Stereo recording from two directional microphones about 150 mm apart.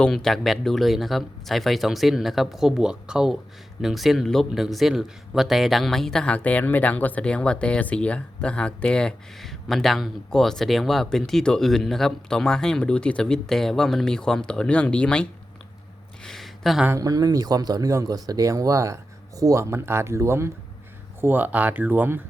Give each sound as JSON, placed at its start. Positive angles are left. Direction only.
{"t": 0.0, "sound": "speech", "side_deg": 0}
{"t": 16.2, "sound": "a sound", "side_deg": 0}
{"t": 16.8, "sound": "speech", "side_deg": -20}